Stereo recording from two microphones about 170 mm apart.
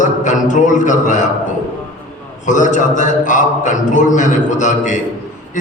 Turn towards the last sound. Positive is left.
turn(degrees=45)  # may be behind; listen again after turning